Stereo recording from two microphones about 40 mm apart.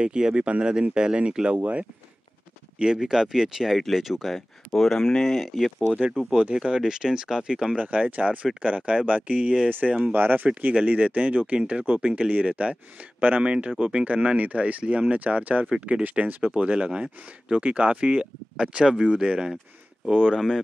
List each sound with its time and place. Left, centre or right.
0.0 s speech: right
1.6 s speech: right
2.8 s speech: centre
6.3 s speech: right
7.8 s speech: right
16.4 s speech: right
20.3 s speech: centre